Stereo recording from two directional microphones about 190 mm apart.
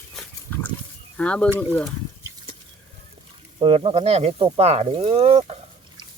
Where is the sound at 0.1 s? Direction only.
10° left (ahead or behind).